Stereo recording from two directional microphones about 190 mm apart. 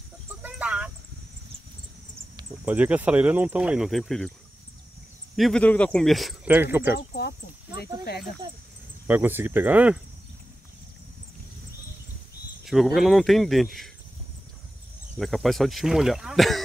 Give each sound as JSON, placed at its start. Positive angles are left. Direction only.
{"t": 0.4, "sound": "a sound", "side_deg": -5}
{"t": 2.6, "sound": "speech", "side_deg": -10}
{"t": 5.3, "sound": "speech", "side_deg": 0}
{"t": 7.0, "sound": "speech", "side_deg": 60}
{"t": 9.0, "sound": "speech", "side_deg": -10}
{"t": 12.6, "sound": "speech", "side_deg": 0}
{"t": 15.1, "sound": "speech", "side_deg": 0}